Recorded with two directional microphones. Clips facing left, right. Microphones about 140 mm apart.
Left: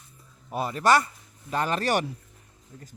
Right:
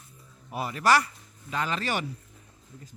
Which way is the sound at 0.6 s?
25° left (ahead or behind).